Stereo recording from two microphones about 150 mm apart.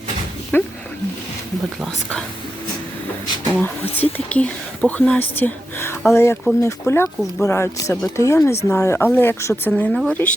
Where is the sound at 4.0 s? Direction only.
10° left (ahead or behind).